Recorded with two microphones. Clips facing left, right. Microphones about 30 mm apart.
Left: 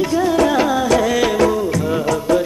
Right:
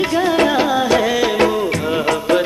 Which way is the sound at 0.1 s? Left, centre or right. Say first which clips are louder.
Even; right.